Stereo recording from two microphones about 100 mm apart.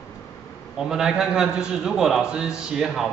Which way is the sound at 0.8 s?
5° right (ahead or behind).